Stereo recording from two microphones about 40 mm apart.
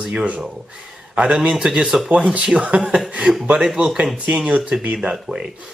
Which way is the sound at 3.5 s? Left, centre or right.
Centre.